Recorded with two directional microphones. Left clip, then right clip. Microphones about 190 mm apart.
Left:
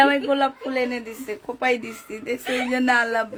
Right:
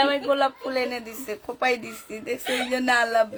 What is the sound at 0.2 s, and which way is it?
Speech, 10° left (ahead or behind).